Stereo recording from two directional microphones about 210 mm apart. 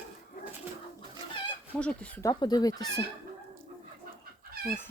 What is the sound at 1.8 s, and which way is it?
Speech, 5° left (ahead or behind).